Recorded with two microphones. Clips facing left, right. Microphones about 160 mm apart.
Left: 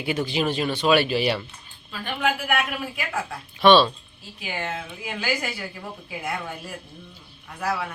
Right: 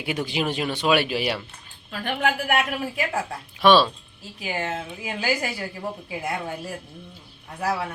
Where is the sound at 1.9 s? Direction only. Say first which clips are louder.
Right 1 dB; 55° right (ahead or behind).